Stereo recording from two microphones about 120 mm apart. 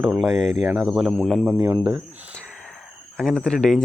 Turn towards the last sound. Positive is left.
turn(degrees=5)  # may be behind; listen again after turning